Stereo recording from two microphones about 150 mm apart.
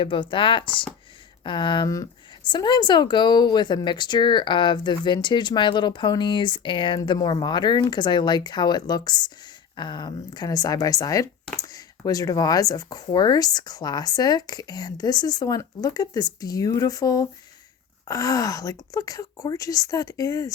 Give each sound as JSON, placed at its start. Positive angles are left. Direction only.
{"t": 0.0, "sound": "speech", "side_deg": 35}